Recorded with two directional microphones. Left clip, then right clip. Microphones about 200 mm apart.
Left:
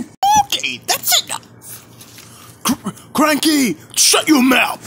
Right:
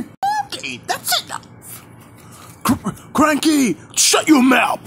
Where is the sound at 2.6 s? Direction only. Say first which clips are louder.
Right 1 dB; centre (ahead or behind).